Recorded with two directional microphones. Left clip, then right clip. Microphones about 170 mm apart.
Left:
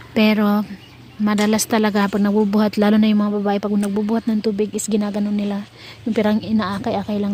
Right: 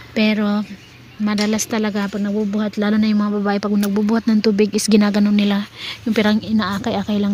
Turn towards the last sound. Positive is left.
turn(degrees=0)  # may be behind; listen again after turning